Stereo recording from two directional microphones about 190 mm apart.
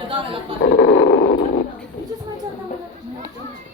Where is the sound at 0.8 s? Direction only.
80° left.